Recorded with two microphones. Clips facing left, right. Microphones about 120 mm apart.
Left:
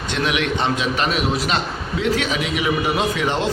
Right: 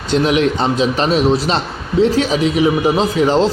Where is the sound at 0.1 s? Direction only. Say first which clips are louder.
Right 8 dB; 35° right (ahead or behind).